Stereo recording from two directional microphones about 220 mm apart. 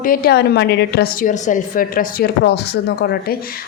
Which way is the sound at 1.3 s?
35° left (ahead or behind).